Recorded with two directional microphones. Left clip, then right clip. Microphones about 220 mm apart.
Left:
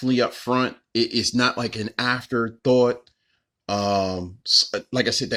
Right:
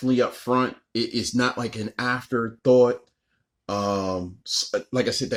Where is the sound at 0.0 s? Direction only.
40° left (ahead or behind).